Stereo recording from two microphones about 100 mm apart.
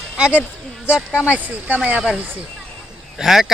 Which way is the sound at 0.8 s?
10° right (ahead or behind).